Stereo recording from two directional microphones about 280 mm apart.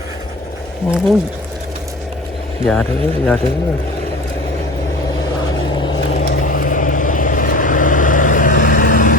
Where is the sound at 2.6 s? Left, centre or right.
Centre.